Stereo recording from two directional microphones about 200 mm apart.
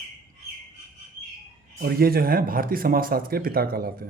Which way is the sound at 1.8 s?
50° right (ahead or behind).